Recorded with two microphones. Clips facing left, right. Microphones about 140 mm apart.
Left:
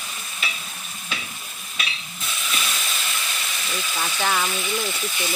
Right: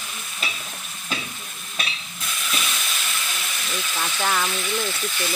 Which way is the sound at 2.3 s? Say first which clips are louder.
Even; centre (ahead or behind).